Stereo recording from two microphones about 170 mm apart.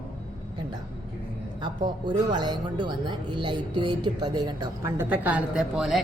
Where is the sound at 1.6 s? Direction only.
25° right (ahead or behind).